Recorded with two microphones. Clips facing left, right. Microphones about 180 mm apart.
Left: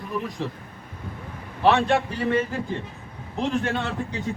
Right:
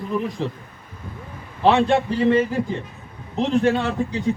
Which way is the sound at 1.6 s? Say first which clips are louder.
Right 3 dB; 20° right (ahead or behind).